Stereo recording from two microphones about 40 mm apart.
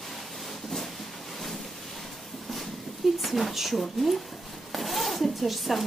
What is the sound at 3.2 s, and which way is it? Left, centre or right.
Speech, centre.